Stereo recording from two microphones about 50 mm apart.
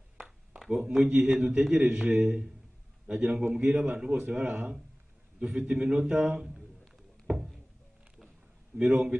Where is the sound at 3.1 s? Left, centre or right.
Centre.